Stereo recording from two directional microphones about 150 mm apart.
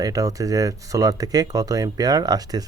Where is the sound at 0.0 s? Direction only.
25° right (ahead or behind).